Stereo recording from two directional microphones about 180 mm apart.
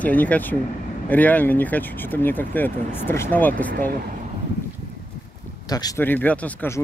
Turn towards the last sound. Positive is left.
turn(degrees=10)  # may be behind; listen again after turning